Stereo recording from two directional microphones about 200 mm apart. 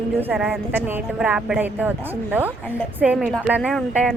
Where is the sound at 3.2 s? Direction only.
5° left (ahead or behind).